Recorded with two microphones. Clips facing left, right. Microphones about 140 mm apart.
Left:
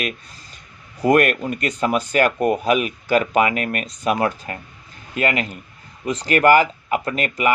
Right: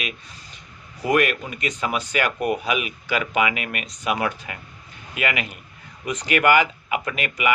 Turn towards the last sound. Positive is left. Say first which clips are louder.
# left 4 dB
turn(degrees=35)  # may be behind; listen again after turning